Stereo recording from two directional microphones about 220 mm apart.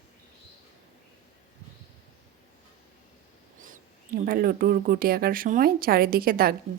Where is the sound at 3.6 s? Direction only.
40° right (ahead or behind).